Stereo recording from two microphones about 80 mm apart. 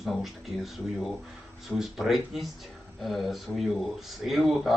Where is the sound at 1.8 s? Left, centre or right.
Centre.